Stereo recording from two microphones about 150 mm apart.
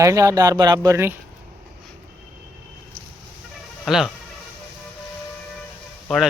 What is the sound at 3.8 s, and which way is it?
Speech, centre (ahead or behind).